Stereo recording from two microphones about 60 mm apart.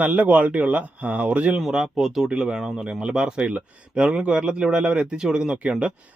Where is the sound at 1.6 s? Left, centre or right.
Centre.